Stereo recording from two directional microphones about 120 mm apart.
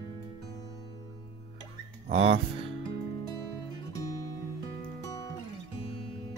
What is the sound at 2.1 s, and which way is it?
Speech, 50° right (ahead or behind).